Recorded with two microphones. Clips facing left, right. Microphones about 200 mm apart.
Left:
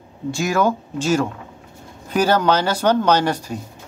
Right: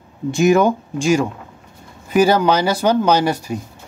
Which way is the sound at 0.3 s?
20° right (ahead or behind).